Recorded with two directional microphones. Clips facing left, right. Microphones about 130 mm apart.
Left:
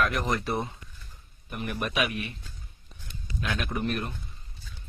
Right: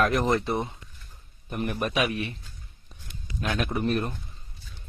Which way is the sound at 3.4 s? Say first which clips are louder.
Right 3 dB; 40° right (ahead or behind).